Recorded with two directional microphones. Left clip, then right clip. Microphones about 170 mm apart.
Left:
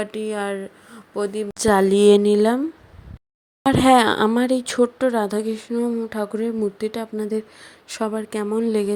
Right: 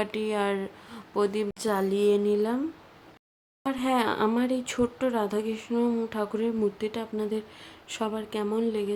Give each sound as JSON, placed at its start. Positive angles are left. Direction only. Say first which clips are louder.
{"t": 0.0, "sound": "speech", "louder": "left 2 dB", "side_deg": 15}
{"t": 1.5, "sound": "a woman's voice", "louder": "left 10 dB", "side_deg": 50}
{"t": 3.6, "sound": "a woman's voice", "louder": "left 12 dB", "side_deg": 55}